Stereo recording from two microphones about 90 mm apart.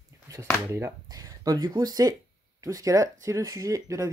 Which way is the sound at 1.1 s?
45° right (ahead or behind).